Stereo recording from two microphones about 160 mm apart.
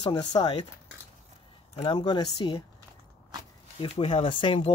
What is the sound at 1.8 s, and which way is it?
Speech, 30° left (ahead or behind).